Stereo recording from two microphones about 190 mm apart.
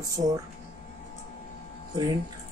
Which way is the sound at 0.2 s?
30° right (ahead or behind).